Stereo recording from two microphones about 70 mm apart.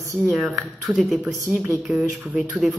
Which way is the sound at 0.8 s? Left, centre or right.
Centre.